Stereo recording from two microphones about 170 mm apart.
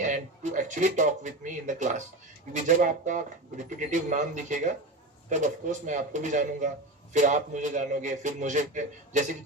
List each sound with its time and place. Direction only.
0.0 s a man's voice: 45° right (ahead or behind)